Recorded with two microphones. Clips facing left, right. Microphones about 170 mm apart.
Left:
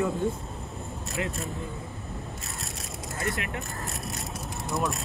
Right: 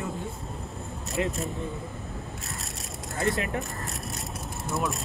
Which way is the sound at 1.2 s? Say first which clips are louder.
Right 4 dB; 25° right (ahead or behind).